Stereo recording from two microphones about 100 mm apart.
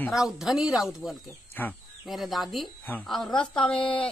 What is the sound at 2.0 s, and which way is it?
Speech, centre (ahead or behind).